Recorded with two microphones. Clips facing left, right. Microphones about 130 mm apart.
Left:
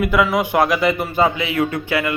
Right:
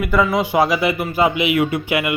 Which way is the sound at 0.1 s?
Centre (ahead or behind).